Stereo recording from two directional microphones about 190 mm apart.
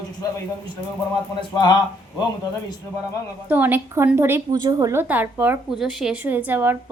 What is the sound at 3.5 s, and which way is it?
A woman's voice, 10° right (ahead or behind).